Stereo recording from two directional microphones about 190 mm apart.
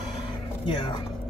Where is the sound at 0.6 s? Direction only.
25° left (ahead or behind).